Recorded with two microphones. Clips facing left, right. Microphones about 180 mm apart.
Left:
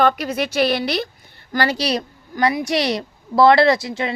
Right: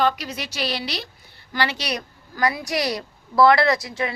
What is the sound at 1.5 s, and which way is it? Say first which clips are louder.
A woman's voice: left 6 dB; 40° left (ahead or behind).